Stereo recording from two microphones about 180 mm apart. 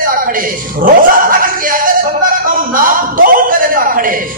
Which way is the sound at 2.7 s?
50° right (ahead or behind).